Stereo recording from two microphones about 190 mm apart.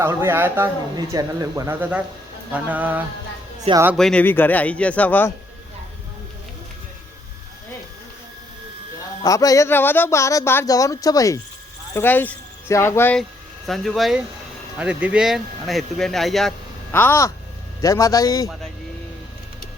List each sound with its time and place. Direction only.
0.0 s speech: 15° right (ahead or behind)
3.9 s speech: 5° left (ahead or behind)
9.2 s a man's voice: 20° left (ahead or behind)